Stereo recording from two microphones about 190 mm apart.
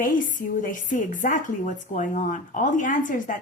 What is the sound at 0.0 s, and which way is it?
Speech, 45° left (ahead or behind).